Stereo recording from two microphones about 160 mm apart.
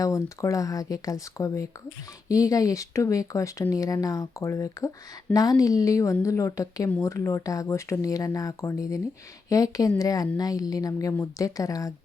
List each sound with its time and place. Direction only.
0.0 s speech: 20° left (ahead or behind)